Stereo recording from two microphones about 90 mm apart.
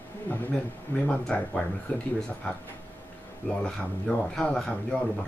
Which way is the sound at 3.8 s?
10° left (ahead or behind).